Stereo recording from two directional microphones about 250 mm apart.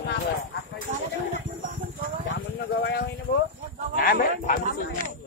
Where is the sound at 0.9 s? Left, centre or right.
Right.